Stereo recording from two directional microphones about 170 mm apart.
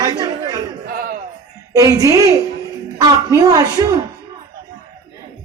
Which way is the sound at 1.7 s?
20° right (ahead or behind).